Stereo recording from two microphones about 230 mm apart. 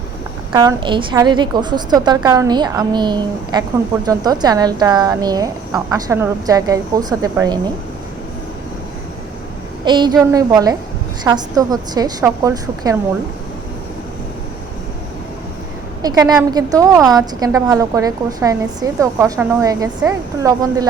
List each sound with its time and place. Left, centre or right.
0.5 s a woman's voice: centre
9.8 s a woman's voice: centre
16.0 s a woman's voice: centre